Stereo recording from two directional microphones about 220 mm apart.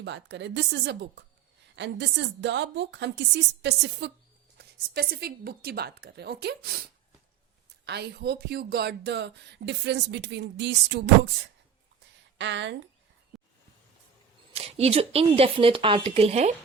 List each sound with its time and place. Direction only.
0.0 s speech: 55° right (ahead or behind)
7.9 s speech: 50° right (ahead or behind)
12.4 s speech: 55° right (ahead or behind)
14.5 s speech: 25° right (ahead or behind)